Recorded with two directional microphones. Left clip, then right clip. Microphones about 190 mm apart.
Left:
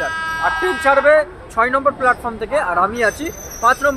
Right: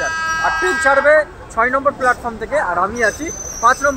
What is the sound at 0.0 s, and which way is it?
Music, 35° left (ahead or behind).